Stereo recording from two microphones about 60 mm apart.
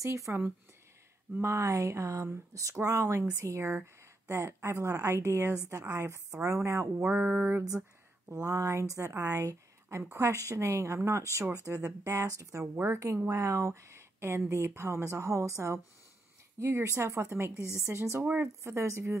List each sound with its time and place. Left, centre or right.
0.0 s speech: right
1.4 s speech: right
7.1 s speech: right
7.3 s a woman's voice: right
8.3 s speech: right
12.7 s a woman's voice: right
13.3 s speech: right